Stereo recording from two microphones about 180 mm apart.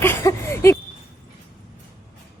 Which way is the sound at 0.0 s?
15° left (ahead or behind).